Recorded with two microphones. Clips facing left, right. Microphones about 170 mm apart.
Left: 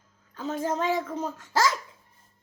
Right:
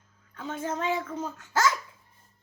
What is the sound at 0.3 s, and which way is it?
Speech, 35° left (ahead or behind).